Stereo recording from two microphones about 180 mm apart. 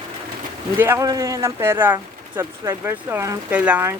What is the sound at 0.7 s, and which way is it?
Speech, 15° right (ahead or behind).